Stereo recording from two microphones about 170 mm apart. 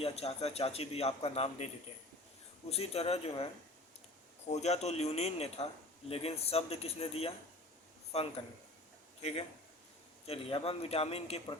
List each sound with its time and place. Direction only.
0.0 s a man's voice: 35° left (ahead or behind)
4.5 s a man's voice: 40° left (ahead or behind)
10.2 s a man's voice: 35° left (ahead or behind)